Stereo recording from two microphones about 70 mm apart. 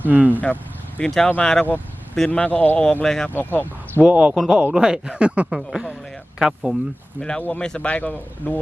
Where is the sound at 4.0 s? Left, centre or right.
Centre.